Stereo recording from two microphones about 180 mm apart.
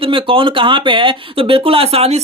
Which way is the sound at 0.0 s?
30° right (ahead or behind).